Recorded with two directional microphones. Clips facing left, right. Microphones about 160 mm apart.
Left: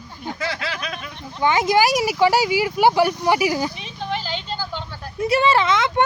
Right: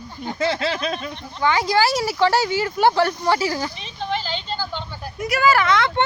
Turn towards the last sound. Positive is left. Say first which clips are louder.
# even
turn(degrees=20)  # may be behind; listen again after turning